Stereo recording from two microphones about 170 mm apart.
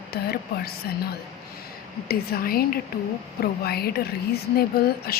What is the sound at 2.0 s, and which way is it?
A woman's voice, 60° left (ahead or behind).